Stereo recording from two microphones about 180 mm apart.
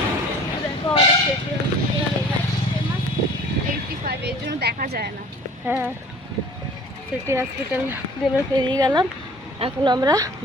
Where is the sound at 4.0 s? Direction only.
65° right (ahead or behind).